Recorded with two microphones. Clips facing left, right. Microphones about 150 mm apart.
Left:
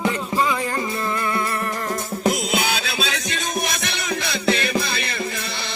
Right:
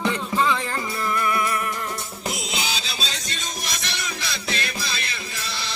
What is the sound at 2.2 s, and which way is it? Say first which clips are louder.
Music: left 8 dB; 55° left (ahead or behind).